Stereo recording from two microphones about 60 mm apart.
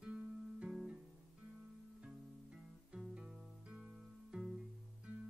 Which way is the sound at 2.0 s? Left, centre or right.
Centre.